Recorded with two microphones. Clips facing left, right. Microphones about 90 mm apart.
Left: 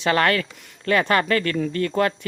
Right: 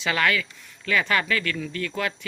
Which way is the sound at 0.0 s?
45° left (ahead or behind).